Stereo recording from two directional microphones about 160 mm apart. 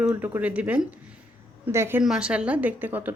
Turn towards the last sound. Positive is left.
turn(degrees=-10)  # may be behind; listen again after turning